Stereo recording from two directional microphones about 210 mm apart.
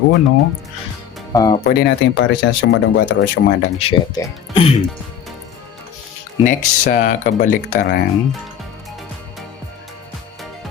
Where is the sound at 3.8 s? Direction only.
25° left (ahead or behind).